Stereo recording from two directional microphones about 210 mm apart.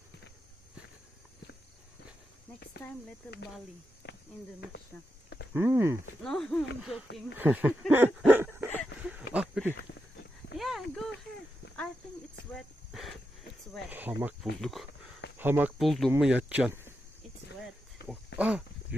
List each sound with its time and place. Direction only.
2.8 s snake: 50° left (ahead or behind)
3.2 s speech: 5° left (ahead or behind)
5.5 s speech: 10° right (ahead or behind)
6.2 s speech: 5° left (ahead or behind)
9.0 s a sound: 5° right (ahead or behind)
12.5 s speech: centre (ahead or behind)
18.3 s a sound: 5° right (ahead or behind)